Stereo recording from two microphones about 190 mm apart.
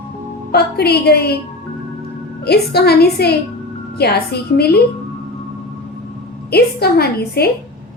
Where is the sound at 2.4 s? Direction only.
60° left (ahead or behind).